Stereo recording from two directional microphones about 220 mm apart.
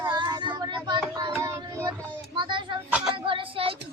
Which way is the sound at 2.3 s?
20° right (ahead or behind).